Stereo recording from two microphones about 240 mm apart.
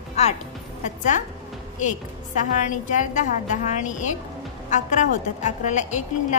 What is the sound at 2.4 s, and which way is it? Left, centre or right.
A woman's voice, left.